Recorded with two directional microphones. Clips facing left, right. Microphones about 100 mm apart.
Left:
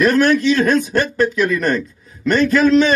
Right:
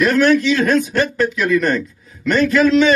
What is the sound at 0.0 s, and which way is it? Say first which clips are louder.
Speech: even; 45° left (ahead or behind).